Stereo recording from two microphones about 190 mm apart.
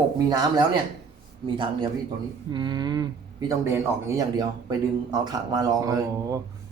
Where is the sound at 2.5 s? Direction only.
25° right (ahead or behind).